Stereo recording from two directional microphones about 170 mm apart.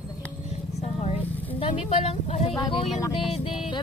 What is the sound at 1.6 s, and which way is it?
Speech, 35° left (ahead or behind).